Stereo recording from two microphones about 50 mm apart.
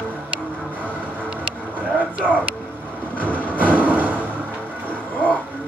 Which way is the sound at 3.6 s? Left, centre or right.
Right.